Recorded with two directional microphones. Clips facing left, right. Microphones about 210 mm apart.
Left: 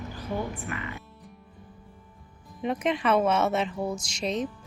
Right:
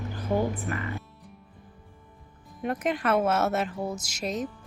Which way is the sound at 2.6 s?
Centre (ahead or behind).